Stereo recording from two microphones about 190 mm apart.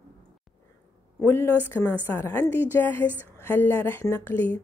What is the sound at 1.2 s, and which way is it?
A woman's voice, 10° left (ahead or behind).